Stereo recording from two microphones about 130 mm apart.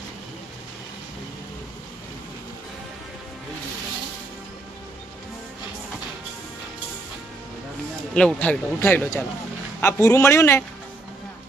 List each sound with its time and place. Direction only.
8.1 s a man's voice: 5° left (ahead or behind)